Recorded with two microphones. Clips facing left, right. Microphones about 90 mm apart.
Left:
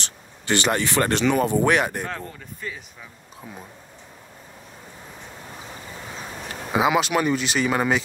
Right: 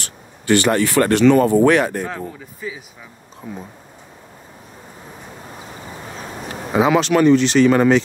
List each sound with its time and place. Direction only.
0.0 s speech: 20° left (ahead or behind)
2.0 s speech: 5° right (ahead or behind)
6.7 s speech: 5° left (ahead or behind)